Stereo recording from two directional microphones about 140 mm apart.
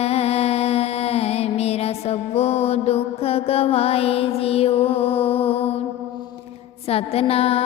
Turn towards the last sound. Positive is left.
turn(degrees=45)  # may be behind; listen again after turning